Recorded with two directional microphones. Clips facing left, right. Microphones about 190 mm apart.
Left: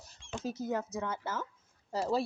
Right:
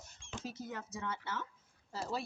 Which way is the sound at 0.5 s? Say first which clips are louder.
Left 9 dB; 40° left (ahead or behind).